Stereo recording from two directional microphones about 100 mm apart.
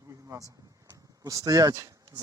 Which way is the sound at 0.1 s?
35° right (ahead or behind).